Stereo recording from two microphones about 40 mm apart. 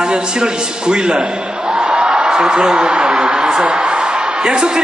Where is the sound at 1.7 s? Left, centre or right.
Right.